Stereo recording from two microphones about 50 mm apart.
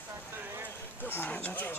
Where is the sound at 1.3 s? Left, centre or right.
Left.